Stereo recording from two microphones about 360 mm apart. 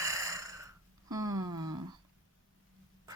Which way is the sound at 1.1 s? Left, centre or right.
Centre.